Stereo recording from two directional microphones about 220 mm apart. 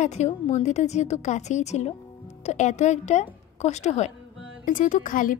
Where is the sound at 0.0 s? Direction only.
30° left (ahead or behind).